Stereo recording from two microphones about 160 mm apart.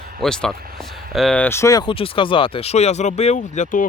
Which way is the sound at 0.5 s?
70° right (ahead or behind).